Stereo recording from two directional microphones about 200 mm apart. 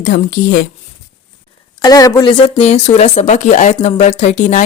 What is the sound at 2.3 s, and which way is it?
Speech, 35° left (ahead or behind).